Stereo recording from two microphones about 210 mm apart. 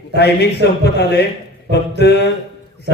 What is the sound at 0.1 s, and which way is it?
A man's voice, 50° left (ahead or behind).